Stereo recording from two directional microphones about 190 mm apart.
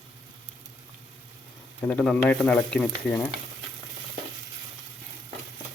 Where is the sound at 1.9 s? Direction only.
5° left (ahead or behind).